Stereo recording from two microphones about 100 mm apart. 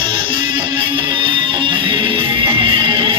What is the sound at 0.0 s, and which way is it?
Music, 55° right (ahead or behind).